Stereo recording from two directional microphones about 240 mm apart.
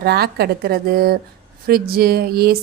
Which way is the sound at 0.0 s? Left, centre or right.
Right.